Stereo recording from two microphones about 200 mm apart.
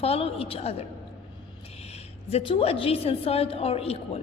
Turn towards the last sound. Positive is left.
turn(degrees=30)  # may be behind; listen again after turning